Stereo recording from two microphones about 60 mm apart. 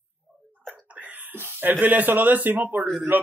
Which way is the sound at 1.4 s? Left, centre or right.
Right.